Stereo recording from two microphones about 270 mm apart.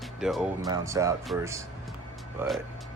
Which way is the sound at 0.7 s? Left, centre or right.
Centre.